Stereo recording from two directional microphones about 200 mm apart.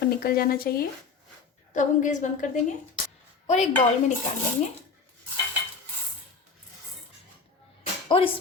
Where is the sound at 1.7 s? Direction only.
40° left (ahead or behind).